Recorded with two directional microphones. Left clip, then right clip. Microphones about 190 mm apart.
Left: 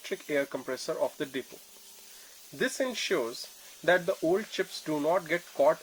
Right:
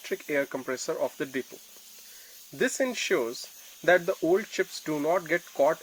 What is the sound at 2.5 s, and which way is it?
Speech, 25° right (ahead or behind).